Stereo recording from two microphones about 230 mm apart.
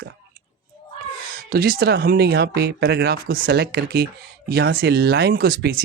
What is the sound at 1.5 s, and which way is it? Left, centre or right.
Speech, right.